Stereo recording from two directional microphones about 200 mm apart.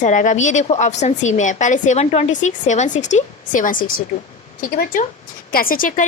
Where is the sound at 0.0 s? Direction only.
40° left (ahead or behind).